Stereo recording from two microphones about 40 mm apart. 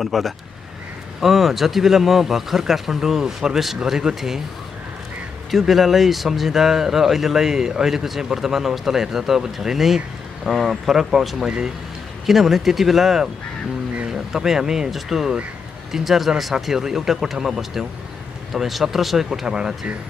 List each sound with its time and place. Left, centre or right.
0.0 s speech: centre
5.5 s speech: centre
11.4 s speech: centre
12.3 s speech: centre
19.4 s speech: centre